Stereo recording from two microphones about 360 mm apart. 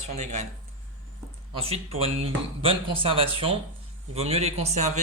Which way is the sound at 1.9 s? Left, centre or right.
Centre.